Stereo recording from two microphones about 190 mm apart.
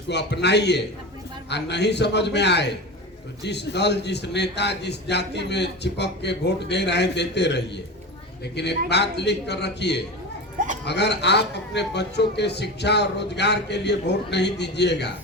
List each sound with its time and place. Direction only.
0.1 s a man's voice: 65° left (ahead or behind)